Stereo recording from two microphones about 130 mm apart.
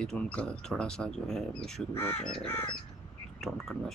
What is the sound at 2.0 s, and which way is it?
Speech, 15° left (ahead or behind).